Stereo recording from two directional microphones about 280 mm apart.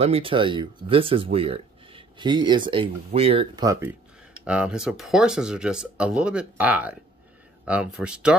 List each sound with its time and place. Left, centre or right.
0.0 s speech: centre